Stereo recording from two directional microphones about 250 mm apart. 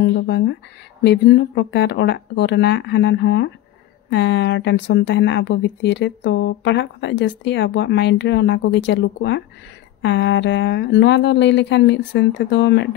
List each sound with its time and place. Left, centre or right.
0.0 s speech: left